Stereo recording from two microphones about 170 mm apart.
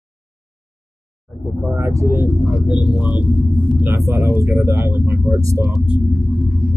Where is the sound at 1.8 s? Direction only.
15° right (ahead or behind).